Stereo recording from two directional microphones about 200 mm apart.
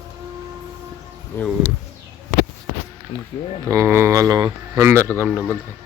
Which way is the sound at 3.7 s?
15° right (ahead or behind).